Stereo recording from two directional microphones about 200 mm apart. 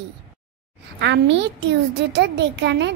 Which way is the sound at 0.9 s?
60° right (ahead or behind).